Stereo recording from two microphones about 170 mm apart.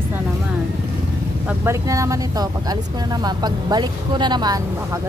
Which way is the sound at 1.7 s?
20° right (ahead or behind).